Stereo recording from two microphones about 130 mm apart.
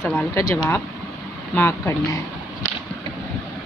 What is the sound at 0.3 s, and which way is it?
Speech, 25° left (ahead or behind).